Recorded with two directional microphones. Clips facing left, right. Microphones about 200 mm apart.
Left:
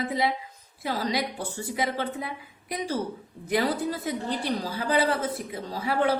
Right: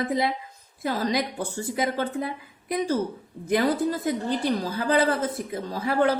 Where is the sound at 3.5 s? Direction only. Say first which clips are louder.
Right 3 dB; 50° right (ahead or behind).